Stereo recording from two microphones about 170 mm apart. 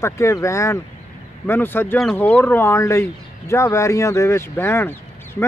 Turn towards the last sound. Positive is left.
turn(degrees=15)  # may be behind; listen again after turning